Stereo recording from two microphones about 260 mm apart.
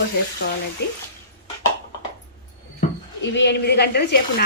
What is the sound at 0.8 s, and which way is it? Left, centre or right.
Speech, left.